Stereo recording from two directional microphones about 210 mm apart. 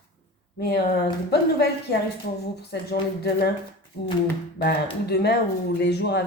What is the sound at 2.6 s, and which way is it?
A woman's voice, 50° left (ahead or behind).